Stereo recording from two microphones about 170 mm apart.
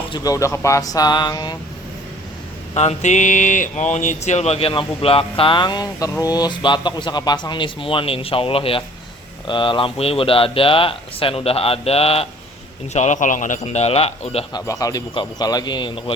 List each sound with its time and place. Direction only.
0.1 s speech: 20° left (ahead or behind)
2.7 s speech: 45° left (ahead or behind)
14.5 s speech: 20° left (ahead or behind)